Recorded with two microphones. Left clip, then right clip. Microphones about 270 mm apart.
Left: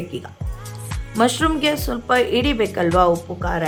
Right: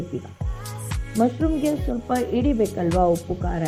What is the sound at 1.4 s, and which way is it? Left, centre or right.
Speech, centre.